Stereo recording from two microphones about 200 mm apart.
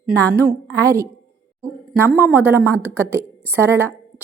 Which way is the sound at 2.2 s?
10° right (ahead or behind).